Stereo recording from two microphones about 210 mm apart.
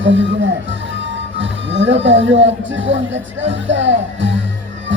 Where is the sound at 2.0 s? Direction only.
60° right (ahead or behind).